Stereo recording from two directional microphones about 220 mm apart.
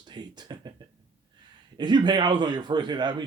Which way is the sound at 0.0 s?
20° right (ahead or behind).